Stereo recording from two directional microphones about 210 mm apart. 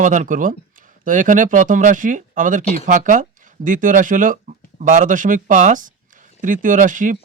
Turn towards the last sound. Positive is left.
turn(degrees=-40)  # may be behind; listen again after turning